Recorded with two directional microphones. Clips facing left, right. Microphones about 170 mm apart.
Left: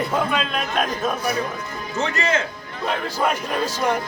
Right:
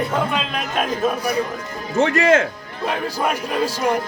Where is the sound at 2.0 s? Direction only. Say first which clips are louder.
Right 7 dB; 55° right (ahead or behind).